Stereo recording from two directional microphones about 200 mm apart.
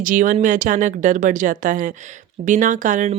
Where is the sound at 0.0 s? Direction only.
40° right (ahead or behind).